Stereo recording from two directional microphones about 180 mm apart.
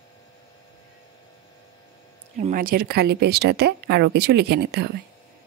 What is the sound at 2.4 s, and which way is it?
Speech, 45° right (ahead or behind).